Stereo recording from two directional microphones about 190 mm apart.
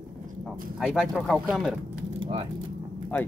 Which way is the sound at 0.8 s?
Centre (ahead or behind).